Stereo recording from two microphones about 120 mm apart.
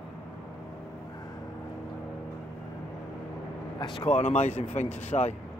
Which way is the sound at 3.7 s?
40° left (ahead or behind).